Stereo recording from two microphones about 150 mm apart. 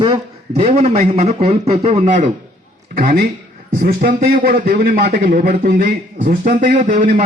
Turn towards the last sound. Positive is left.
turn(degrees=-60)  # may be behind; listen again after turning